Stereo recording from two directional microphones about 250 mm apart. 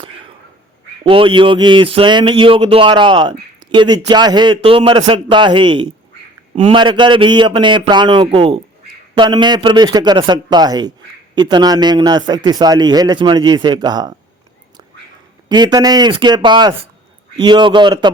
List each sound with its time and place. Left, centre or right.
1.0 s a man's voice: right
15.4 s a man's voice: centre